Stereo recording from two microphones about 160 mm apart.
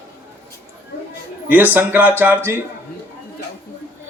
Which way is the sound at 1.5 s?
10° right (ahead or behind).